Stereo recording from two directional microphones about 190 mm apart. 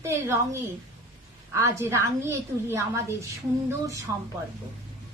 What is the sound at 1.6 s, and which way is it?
A woman's voice, 15° right (ahead or behind).